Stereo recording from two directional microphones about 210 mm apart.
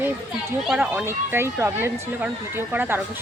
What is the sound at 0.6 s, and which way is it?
Speech, 5° right (ahead or behind).